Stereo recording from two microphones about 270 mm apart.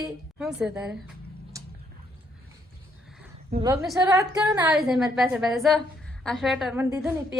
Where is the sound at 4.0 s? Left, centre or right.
Centre.